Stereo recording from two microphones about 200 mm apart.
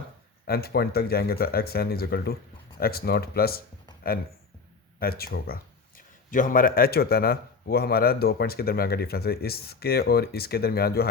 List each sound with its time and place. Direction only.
0.4 s speech: 50° left (ahead or behind)
4.9 s speech: 50° left (ahead or behind)